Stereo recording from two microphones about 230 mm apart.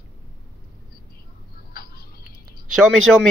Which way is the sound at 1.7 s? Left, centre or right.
Left.